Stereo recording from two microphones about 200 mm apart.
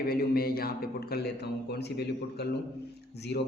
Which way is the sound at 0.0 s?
50° left (ahead or behind).